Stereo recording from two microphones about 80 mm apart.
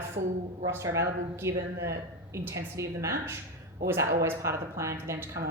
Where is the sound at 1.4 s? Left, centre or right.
Right.